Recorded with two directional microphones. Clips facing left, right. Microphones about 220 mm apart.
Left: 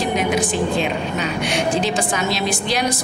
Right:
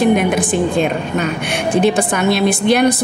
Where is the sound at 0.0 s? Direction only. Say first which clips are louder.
Right 6 dB; 55° right (ahead or behind).